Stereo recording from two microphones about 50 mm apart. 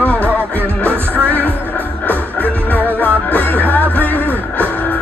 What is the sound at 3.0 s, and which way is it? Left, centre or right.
Music, left.